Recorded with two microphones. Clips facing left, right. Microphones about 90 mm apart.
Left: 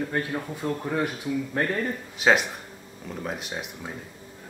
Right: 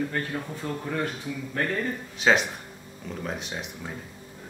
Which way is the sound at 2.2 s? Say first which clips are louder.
Left 1 dB; centre (ahead or behind).